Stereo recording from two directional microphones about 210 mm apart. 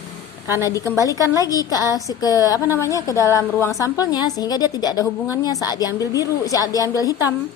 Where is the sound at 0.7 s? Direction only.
15° left (ahead or behind).